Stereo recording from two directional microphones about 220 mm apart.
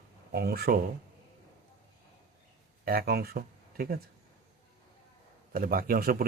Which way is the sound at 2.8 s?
45° right (ahead or behind).